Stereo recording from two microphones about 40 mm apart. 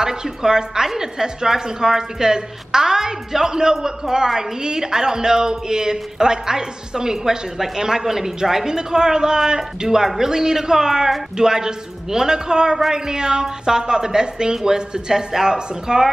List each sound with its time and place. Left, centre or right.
0.0 s a woman's voice: centre